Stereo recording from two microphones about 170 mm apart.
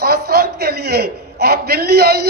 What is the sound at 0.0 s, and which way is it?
A man's voice, 65° right (ahead or behind).